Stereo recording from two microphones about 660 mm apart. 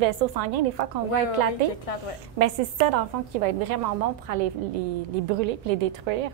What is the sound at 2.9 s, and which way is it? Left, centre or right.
A woman's voice, right.